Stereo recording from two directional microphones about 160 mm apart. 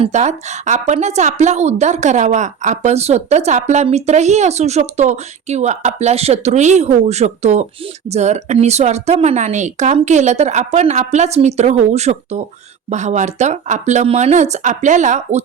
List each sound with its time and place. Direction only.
0.0 s a woman's voice: 45° right (ahead or behind)